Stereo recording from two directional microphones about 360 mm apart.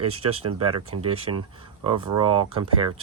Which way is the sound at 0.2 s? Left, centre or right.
Centre.